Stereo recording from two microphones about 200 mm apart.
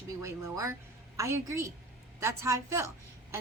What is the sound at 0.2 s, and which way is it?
A woman's voice, 15° right (ahead or behind).